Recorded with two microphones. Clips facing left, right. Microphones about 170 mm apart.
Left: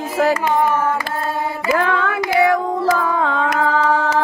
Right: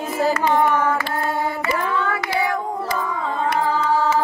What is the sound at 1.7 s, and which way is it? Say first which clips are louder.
Child singing: left 8 dB; 90° left.